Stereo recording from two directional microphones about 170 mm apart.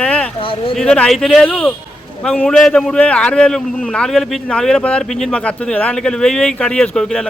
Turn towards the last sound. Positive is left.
turn(degrees=5)  # may be behind; listen again after turning